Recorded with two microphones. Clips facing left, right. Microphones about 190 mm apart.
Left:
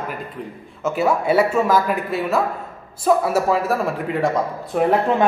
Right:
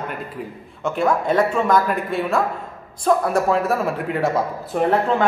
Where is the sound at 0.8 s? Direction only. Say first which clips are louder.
Left 1 dB; 5° left (ahead or behind).